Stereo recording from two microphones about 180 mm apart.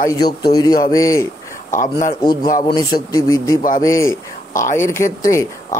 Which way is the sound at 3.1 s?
20° left (ahead or behind).